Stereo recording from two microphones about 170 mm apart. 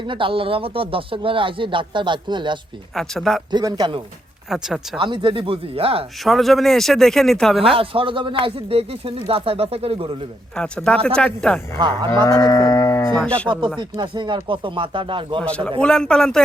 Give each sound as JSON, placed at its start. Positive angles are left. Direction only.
{"t": 0.0, "sound": "speech", "side_deg": -30}
{"t": 2.9, "sound": "speech", "side_deg": 0}
{"t": 3.5, "sound": "speech", "side_deg": -25}
{"t": 4.4, "sound": "speech", "side_deg": -5}
{"t": 4.9, "sound": "speech", "side_deg": -30}
{"t": 6.2, "sound": "speech", "side_deg": 0}
{"t": 7.8, "sound": "speech", "side_deg": -30}
{"t": 10.5, "sound": "speech", "side_deg": 5}
{"t": 12.2, "sound": "moo", "side_deg": 20}
{"t": 13.1, "sound": "speech", "side_deg": 5}
{"t": 13.7, "sound": "speech", "side_deg": -25}
{"t": 15.4, "sound": "speech", "side_deg": 5}